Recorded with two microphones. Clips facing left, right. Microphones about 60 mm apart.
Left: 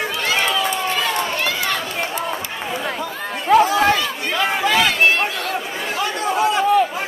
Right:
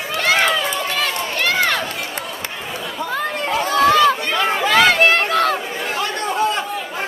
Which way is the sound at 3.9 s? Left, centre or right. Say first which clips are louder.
Right 7 dB; right.